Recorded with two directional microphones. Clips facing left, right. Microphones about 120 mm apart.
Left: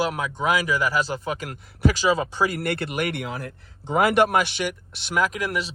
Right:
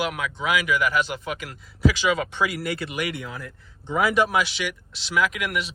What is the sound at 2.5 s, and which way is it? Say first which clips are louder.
Speech: left 2 dB; 60° left (ahead or behind).